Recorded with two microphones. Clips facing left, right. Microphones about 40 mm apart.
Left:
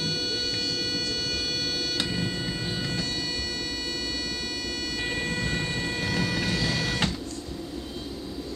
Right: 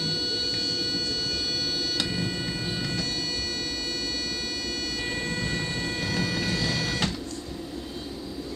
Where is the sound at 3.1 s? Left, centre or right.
Left.